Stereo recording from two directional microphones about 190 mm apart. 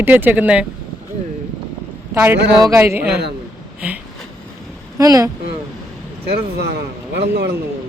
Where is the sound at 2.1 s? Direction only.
10° right (ahead or behind).